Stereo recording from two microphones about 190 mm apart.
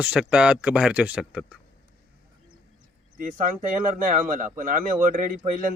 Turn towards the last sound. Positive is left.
turn(degrees=-45)  # may be behind; listen again after turning